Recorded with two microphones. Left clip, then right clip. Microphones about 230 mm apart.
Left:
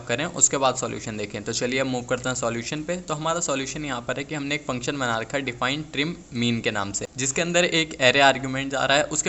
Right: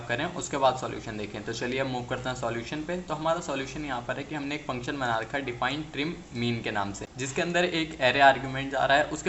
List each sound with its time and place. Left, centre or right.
0.1 s a man's voice: left